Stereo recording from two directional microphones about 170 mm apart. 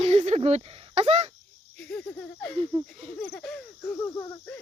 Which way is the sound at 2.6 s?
30° right (ahead or behind).